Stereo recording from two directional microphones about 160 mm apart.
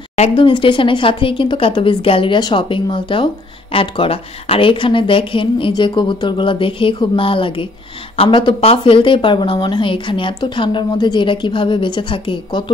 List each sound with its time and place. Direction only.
0.1 s speech: 40° left (ahead or behind)